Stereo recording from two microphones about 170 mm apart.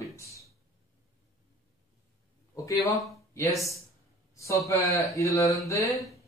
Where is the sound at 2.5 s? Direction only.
20° left (ahead or behind).